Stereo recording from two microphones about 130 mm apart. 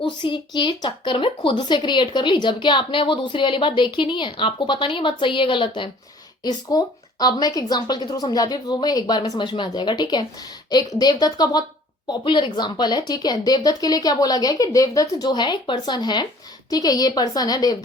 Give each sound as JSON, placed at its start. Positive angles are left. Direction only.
{"t": 0.0, "sound": "a woman's voice", "side_deg": 35}